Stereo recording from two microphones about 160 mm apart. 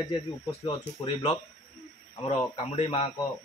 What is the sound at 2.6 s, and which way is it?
Speech, 35° left (ahead or behind).